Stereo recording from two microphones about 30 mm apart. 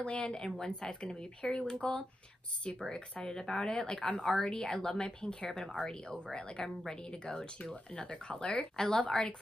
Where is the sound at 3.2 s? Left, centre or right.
Centre.